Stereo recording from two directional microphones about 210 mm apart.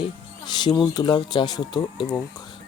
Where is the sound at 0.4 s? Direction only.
20° left (ahead or behind).